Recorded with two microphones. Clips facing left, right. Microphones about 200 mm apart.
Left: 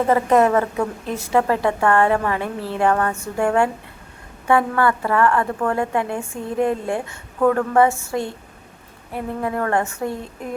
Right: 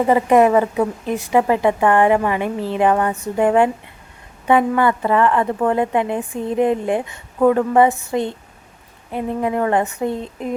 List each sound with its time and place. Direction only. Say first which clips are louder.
0.1 s a woman's voice: right 3 dB; 15° right (ahead or behind)